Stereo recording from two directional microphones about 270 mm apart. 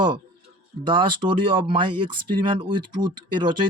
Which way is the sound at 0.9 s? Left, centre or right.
Centre.